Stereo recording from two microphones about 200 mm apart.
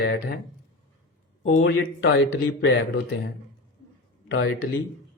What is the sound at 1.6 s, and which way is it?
Speech, 80° left.